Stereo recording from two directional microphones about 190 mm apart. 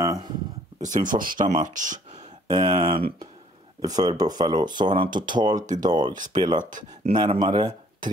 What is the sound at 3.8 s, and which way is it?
Speech, 20° right (ahead or behind).